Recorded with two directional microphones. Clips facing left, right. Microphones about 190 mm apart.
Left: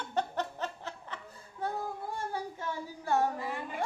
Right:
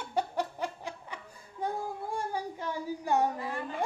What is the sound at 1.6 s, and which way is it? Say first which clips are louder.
Child singing: right 1 dB; 15° right (ahead or behind).